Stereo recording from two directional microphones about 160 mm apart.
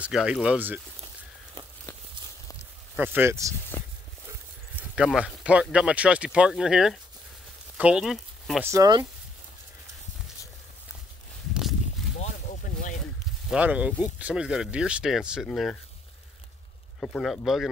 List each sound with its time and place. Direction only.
0.0 s speech: 5° right (ahead or behind)
3.0 s speech: 15° right (ahead or behind)
4.7 s speech: 5° right (ahead or behind)
8.6 s speech: 25° right (ahead or behind)
12.2 s a sound: 50° left (ahead or behind)
13.5 s speech: 10° right (ahead or behind)
17.0 s speech: 5° left (ahead or behind)